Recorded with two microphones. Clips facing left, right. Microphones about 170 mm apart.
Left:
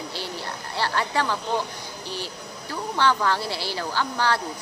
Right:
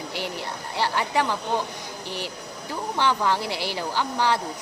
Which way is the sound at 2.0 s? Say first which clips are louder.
Even; 15° right (ahead or behind).